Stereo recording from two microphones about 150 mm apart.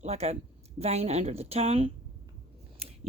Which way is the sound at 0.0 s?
45° right (ahead or behind).